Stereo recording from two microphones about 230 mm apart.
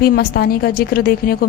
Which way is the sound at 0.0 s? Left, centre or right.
Left.